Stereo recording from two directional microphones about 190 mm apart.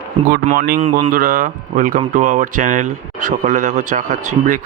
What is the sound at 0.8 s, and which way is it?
Speech, 35° right (ahead or behind).